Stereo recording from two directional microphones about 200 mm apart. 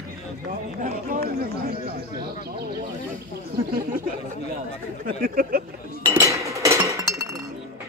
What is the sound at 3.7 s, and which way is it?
Speech, 45° right (ahead or behind).